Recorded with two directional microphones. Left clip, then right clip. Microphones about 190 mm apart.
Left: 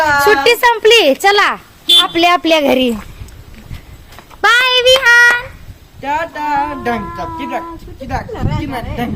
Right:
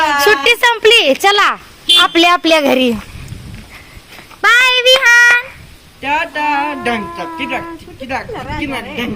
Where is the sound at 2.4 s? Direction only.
5° left (ahead or behind).